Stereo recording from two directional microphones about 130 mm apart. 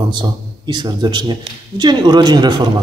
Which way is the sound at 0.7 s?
35° right (ahead or behind).